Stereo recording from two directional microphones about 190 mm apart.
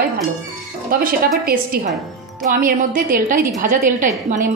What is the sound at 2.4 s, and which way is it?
A woman's voice, 50° right (ahead or behind).